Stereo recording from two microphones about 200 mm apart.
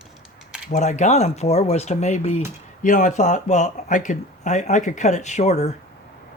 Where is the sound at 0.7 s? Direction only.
35° left (ahead or behind).